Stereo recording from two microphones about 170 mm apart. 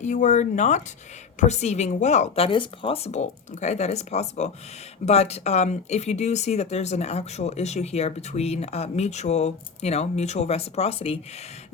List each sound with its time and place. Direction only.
0.0 s speech: 45° left (ahead or behind)